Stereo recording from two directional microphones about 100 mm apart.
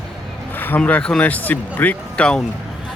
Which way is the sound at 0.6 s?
15° left (ahead or behind).